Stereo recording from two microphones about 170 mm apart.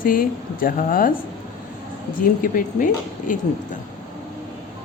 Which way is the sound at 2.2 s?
55° left (ahead or behind).